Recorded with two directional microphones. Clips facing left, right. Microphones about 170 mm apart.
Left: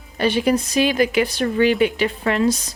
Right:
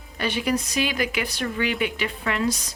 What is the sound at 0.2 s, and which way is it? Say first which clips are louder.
Speech: left 7 dB; 30° left (ahead or behind).